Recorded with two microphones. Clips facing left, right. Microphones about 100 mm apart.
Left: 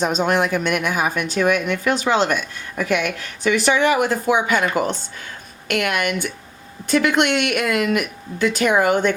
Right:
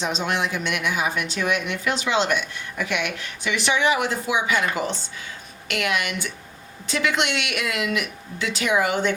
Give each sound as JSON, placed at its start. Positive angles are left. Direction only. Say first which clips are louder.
{"t": 0.0, "sound": "speech", "louder": "left 6 dB", "side_deg": 50}